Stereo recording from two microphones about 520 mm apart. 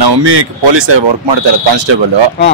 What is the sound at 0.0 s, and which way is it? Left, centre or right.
Speech, right.